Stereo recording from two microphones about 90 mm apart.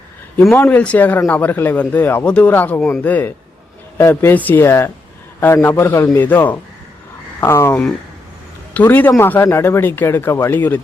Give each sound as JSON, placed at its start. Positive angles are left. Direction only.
{"t": 0.5, "sound": "speech", "side_deg": 20}
{"t": 8.7, "sound": "speech", "side_deg": 20}